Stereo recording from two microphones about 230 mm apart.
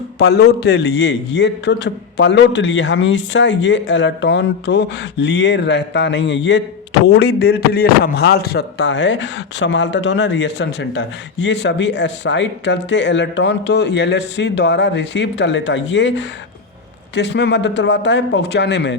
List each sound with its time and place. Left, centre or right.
0.2 s a man's voice: left